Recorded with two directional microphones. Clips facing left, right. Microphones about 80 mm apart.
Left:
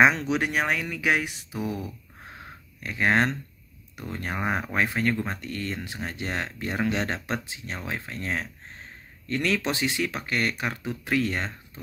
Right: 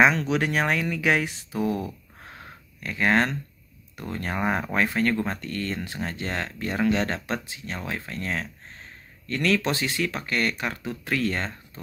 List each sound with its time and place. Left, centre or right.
0.0 s speech: centre
2.8 s speech: centre